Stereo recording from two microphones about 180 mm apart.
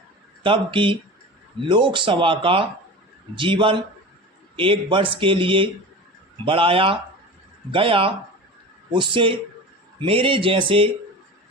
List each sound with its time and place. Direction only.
0.4 s speech: 30° right (ahead or behind)